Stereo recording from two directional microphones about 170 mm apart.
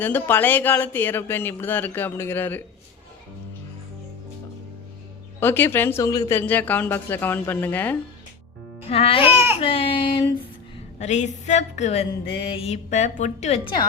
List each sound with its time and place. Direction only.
0.0 s speech: 10° left (ahead or behind)
5.4 s speech: 10° left (ahead or behind)
8.9 s speech: 35° left (ahead or behind)
9.2 s speech: 10° right (ahead or behind)
9.6 s speech: 30° left (ahead or behind)
11.0 s a woman's voice: 45° left (ahead or behind)